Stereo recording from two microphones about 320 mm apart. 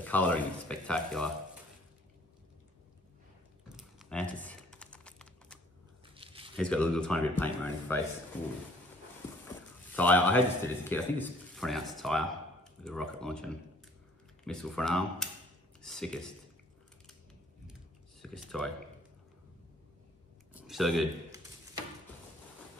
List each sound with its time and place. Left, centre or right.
0.0 s speech: centre
3.6 s typing: centre
6.1 s crumpling: centre
6.5 s speech: centre
9.9 s speech: centre
18.2 s speech: centre
20.5 s speech: centre